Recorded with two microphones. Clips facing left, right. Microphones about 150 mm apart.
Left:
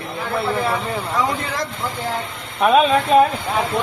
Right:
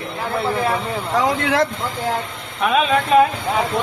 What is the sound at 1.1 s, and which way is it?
Speech, 85° right.